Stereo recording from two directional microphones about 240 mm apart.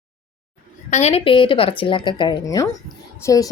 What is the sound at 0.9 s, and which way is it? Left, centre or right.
A woman's voice, left.